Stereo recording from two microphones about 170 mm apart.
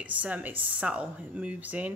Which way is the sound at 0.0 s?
10° right (ahead or behind).